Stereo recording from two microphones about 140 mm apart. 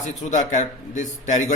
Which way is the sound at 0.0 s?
60° left (ahead or behind).